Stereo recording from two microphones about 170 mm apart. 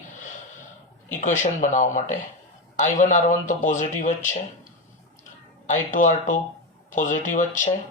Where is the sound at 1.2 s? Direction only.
45° left (ahead or behind).